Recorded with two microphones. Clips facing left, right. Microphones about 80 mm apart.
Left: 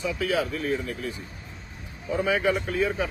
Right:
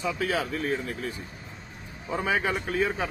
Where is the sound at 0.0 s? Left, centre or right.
Right.